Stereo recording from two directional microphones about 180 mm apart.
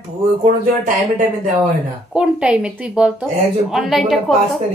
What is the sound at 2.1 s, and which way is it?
Speech, 5° right (ahead or behind).